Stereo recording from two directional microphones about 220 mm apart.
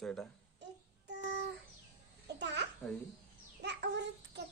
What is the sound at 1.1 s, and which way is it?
Child singing, 50° right (ahead or behind).